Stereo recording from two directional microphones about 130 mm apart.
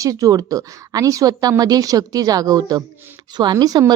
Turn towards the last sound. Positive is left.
turn(degrees=-30)  # may be behind; listen again after turning